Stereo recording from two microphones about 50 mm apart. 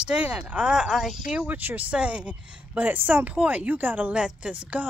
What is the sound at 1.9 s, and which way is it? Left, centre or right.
Speech, right.